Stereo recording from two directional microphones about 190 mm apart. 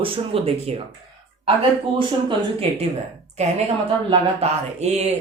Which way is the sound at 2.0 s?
25° right (ahead or behind).